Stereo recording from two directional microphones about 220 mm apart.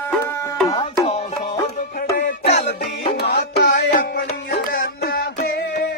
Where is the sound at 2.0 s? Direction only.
40° left (ahead or behind).